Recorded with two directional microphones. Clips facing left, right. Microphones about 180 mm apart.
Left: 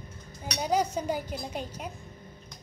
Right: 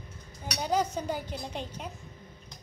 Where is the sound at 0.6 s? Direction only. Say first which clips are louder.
Left 1 dB; 10° left (ahead or behind).